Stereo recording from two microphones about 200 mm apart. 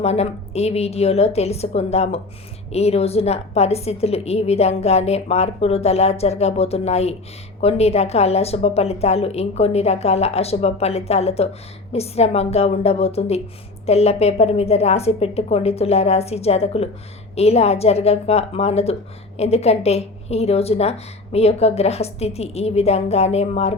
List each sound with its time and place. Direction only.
0.0 s a woman's voice: 30° left (ahead or behind)